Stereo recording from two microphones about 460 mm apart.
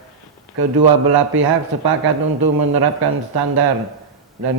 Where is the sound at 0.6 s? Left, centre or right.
Right.